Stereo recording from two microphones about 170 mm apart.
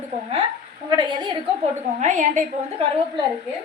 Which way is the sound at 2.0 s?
45° right (ahead or behind).